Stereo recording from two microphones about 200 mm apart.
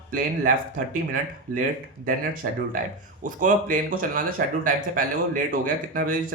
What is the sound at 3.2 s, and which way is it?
Speech, 40° right (ahead or behind).